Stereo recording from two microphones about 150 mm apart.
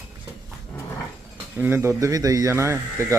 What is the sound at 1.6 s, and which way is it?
Speech, 15° right (ahead or behind).